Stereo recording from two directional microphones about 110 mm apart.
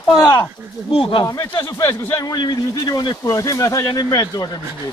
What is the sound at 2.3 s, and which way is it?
Speech, 40° left (ahead or behind).